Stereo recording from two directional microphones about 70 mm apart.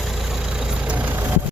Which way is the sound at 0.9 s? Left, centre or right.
Right.